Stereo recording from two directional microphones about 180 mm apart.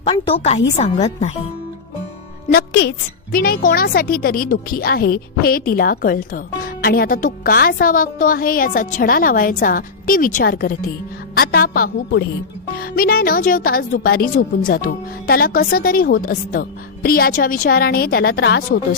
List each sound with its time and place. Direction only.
0.0 s a woman's voice: 30° left (ahead or behind)
2.5 s a woman's voice: 60° left (ahead or behind)